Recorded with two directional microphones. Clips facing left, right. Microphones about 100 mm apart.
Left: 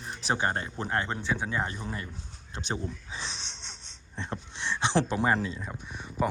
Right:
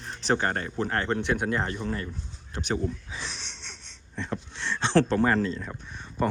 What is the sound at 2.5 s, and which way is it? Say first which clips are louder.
Wheeze: right 5 dB; 20° left (ahead or behind).